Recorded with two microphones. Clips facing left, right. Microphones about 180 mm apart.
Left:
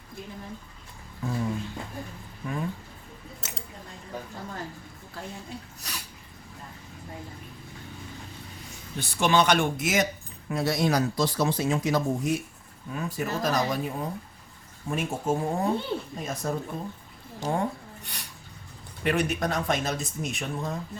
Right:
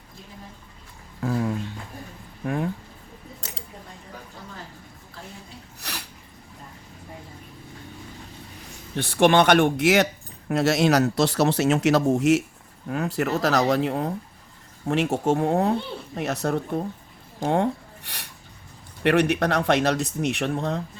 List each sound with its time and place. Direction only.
1.2 s a sound: 70° right (ahead or behind)
2.4 s a sound: 55° right (ahead or behind)
5.8 s sneeze: 65° right (ahead or behind)
9.0 s speech: 55° right (ahead or behind)
10.5 s speech: 80° right
12.9 s speech: 70° right (ahead or behind)